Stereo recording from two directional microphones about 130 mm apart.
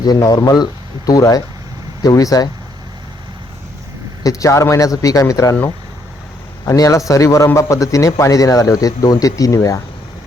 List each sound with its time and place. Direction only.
0.0 s speech: 30° left (ahead or behind)
4.2 s speech: 25° left (ahead or behind)
6.7 s speech: 25° left (ahead or behind)